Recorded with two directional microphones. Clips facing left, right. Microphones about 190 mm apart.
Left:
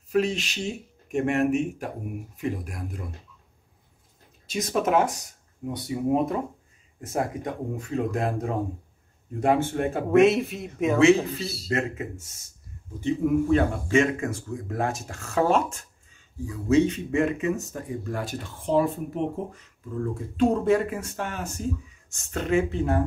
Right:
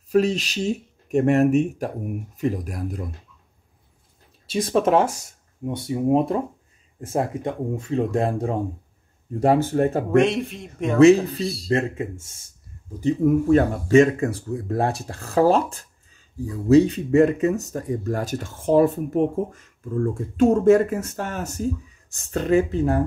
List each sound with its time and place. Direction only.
0.1 s speech: 40° right (ahead or behind)
4.5 s speech: 30° right (ahead or behind)
10.1 s a man's voice: centre (ahead or behind)
11.7 s speech: 30° right (ahead or behind)
13.0 s speech: 40° right (ahead or behind)